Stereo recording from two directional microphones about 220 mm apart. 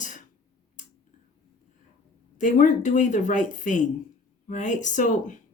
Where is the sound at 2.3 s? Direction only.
35° left (ahead or behind).